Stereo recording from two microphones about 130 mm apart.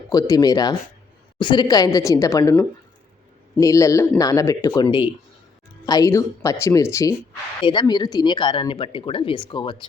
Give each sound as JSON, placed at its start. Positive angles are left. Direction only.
{"t": 0.1, "sound": "speech", "side_deg": 30}
{"t": 7.6, "sound": "speech", "side_deg": 35}